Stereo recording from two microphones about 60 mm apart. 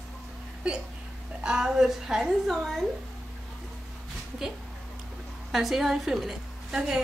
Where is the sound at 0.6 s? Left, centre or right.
Centre.